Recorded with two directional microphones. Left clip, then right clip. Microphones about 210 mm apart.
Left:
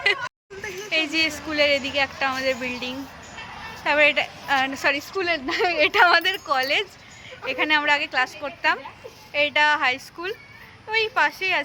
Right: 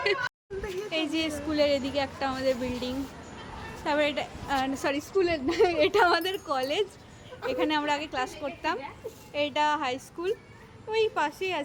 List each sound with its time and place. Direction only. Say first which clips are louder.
0.9 s a woman's voice: left 9 dB; 5° right (ahead or behind)